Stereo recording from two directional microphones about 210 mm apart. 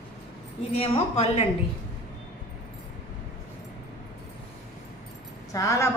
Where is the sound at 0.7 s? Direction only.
30° left (ahead or behind).